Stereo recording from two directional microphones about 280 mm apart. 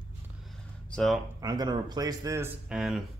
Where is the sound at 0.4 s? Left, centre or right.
Centre.